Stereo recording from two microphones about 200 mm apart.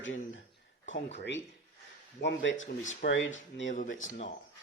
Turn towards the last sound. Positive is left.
turn(degrees=70)  # may be behind; listen again after turning